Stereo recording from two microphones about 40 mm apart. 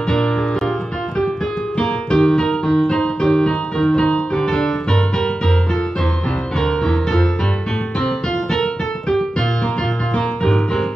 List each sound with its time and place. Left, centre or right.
1.8 s keyboard: centre
6.6 s music: centre
10.1 s music: centre